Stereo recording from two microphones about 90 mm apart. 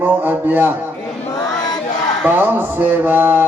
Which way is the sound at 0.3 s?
20° right (ahead or behind).